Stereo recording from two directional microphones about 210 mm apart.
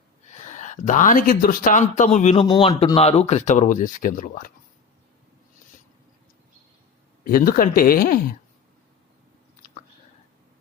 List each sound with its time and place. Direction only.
0.3 s speech: 35° left (ahead or behind)
7.3 s speech: 45° left (ahead or behind)